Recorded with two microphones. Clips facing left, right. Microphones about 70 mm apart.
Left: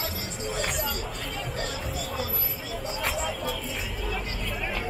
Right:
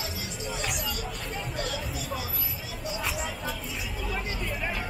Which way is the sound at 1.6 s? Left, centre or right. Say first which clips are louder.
Even; left.